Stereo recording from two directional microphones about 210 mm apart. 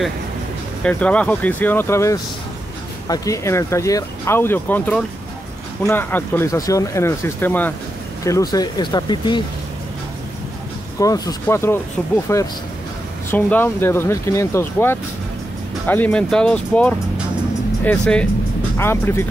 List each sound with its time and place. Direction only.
0.8 s speech: 5° left (ahead or behind)
11.0 s speech: 15° left (ahead or behind)